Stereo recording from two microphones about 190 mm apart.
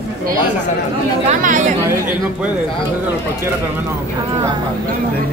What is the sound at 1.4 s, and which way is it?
Speech, 45° right (ahead or behind).